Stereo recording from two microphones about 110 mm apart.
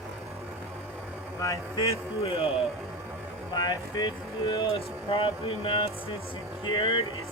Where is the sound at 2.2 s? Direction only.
60° left (ahead or behind).